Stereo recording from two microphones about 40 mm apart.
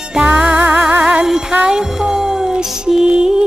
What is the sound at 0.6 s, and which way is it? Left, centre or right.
Music, right.